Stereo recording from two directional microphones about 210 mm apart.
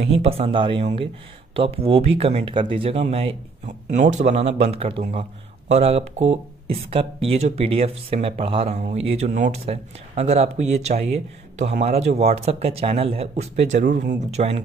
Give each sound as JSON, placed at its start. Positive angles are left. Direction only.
{"t": 0.2, "sound": "speech", "side_deg": -30}